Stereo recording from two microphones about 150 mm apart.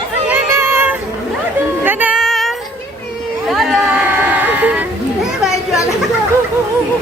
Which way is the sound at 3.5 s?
Centre (ahead or behind).